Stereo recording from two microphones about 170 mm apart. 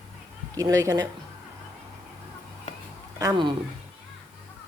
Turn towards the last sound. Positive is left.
turn(degrees=-25)  # may be behind; listen again after turning